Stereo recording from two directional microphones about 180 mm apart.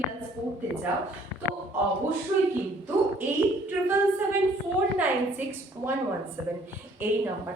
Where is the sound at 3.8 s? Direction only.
10° right (ahead or behind).